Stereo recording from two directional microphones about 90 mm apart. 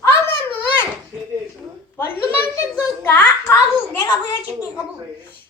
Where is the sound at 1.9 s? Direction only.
25° left (ahead or behind).